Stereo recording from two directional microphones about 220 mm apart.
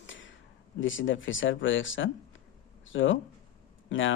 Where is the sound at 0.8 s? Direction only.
60° left (ahead or behind).